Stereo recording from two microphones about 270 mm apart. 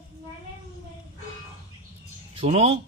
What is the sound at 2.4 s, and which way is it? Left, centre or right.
Speech, right.